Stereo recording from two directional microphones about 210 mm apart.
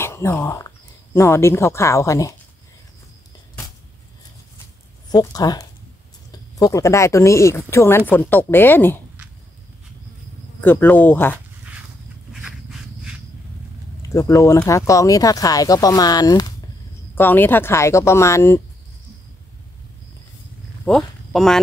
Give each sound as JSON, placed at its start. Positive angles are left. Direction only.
{"t": 0.0, "sound": "speech", "side_deg": 10}
{"t": 5.1, "sound": "speech", "side_deg": 20}
{"t": 10.6, "sound": "speech", "side_deg": 10}
{"t": 12.3, "sound": "a sound", "side_deg": -5}
{"t": 14.0, "sound": "speech", "side_deg": 15}
{"t": 20.8, "sound": "speech", "side_deg": 0}